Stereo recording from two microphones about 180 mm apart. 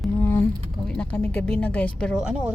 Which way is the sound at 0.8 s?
5° left (ahead or behind).